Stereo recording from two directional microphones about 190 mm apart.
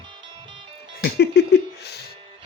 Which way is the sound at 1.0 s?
60° left (ahead or behind).